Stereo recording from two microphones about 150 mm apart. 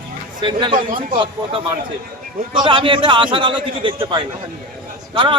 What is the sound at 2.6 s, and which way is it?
A man's voice, 35° right (ahead or behind).